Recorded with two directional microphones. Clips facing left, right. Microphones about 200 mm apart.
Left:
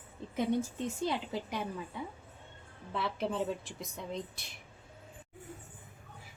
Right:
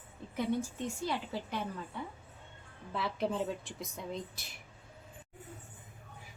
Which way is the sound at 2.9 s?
Centre (ahead or behind).